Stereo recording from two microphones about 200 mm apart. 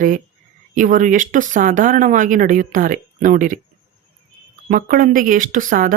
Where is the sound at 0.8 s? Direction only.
40° right (ahead or behind).